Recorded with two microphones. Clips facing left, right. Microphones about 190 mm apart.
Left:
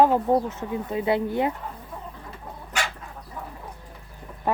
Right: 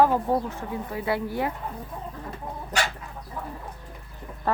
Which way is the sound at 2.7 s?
40° right (ahead or behind).